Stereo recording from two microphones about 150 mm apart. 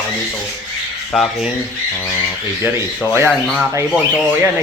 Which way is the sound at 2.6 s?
15° right (ahead or behind).